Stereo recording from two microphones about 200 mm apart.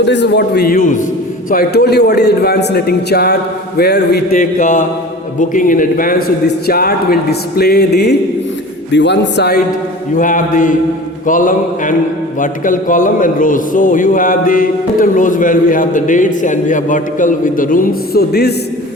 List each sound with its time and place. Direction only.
0.0 s a man's voice: 60° left (ahead or behind)
10.2 s a man's voice: 40° left (ahead or behind)